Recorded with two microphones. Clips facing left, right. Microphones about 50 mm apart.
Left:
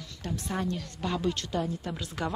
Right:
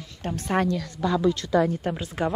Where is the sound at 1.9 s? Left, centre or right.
Right.